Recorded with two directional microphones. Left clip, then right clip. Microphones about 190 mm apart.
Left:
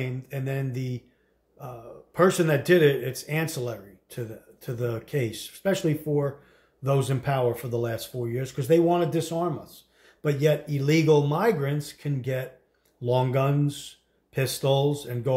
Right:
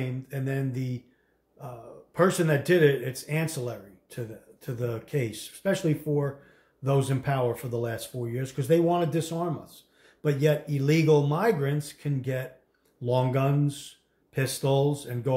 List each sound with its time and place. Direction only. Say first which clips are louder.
0.0 s speech: left 1 dB; 15° left (ahead or behind)